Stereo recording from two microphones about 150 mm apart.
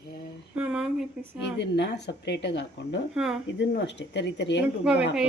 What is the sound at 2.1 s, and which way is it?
Speech, 90° left.